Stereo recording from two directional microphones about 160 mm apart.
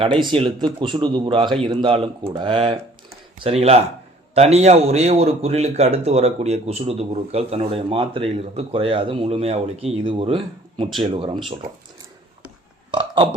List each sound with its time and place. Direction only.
0.0 s a man's voice: 30° right (ahead or behind)
12.9 s burping: 30° right (ahead or behind)